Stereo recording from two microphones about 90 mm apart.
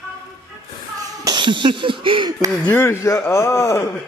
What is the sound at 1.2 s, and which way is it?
Speech, 60° right (ahead or behind).